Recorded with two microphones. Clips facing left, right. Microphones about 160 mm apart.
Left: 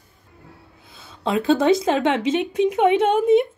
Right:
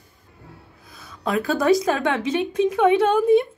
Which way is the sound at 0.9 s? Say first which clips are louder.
Left 1 dB; 25° left (ahead or behind).